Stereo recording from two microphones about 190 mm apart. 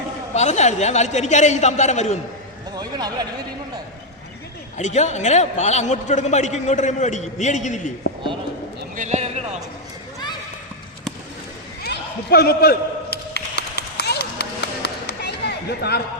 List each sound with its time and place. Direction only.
0.3 s a man's voice: 35° left (ahead or behind)
2.7 s speech: 20° right (ahead or behind)
4.8 s a man's voice: 40° left (ahead or behind)
9.0 s speech: 35° right (ahead or behind)
11.8 s a sound: 55° left (ahead or behind)